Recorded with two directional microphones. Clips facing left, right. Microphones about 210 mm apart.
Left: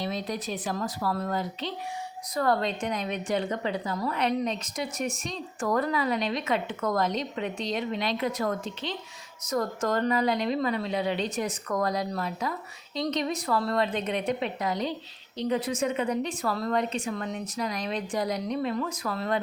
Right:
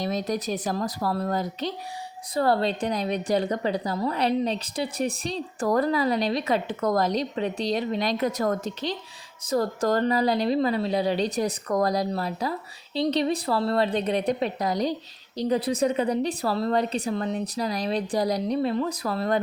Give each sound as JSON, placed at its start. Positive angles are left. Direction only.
{"t": 0.0, "sound": "a woman's voice", "side_deg": -45}